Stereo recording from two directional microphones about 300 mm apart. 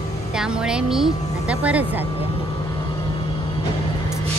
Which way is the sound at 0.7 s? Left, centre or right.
Centre.